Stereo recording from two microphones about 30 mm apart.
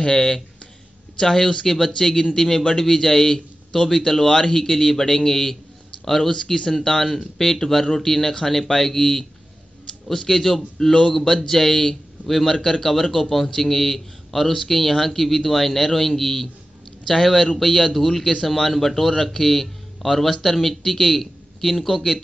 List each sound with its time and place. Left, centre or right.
0.0 s a man's voice: left
6.3 s speech: left
6.7 s a man's voice: centre